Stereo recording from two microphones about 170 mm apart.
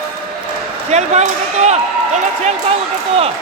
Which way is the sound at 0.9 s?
40° right (ahead or behind).